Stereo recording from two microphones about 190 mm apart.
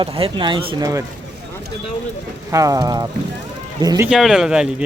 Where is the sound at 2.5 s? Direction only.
15° right (ahead or behind).